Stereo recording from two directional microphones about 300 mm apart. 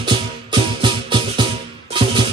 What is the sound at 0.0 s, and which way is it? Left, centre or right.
Music, centre.